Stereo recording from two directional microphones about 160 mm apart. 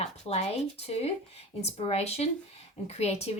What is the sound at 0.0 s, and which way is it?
A woman's voice, 45° left (ahead or behind).